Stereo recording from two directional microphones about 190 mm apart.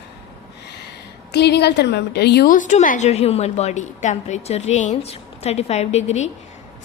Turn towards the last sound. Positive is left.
turn(degrees=35)  # may be behind; listen again after turning